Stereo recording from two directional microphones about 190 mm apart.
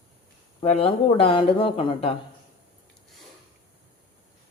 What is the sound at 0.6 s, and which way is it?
Speech, 30° left (ahead or behind).